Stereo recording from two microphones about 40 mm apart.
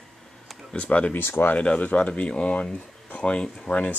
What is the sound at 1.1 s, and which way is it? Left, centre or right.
Speech, left.